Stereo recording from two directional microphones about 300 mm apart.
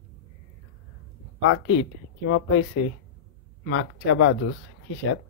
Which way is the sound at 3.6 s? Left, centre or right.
Left.